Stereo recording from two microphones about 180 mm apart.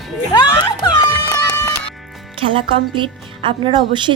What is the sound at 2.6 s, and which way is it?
Speech, 30° right (ahead or behind).